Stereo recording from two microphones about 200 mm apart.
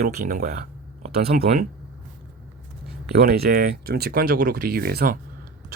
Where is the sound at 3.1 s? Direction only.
50° right (ahead or behind).